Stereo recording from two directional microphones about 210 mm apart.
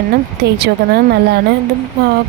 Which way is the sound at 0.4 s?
50° right (ahead or behind).